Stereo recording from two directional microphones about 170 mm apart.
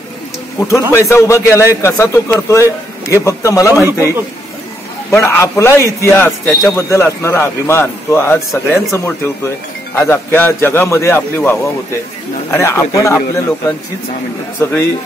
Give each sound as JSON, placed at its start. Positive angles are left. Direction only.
{"t": 0.6, "sound": "a man's voice", "side_deg": 15}
{"t": 3.8, "sound": "a man's voice", "side_deg": -15}
{"t": 5.1, "sound": "a man's voice", "side_deg": 15}
{"t": 14.6, "sound": "a man's voice", "side_deg": 15}